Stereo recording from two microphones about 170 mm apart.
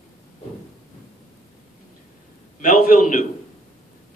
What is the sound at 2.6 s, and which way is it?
Speech, 50° left (ahead or behind).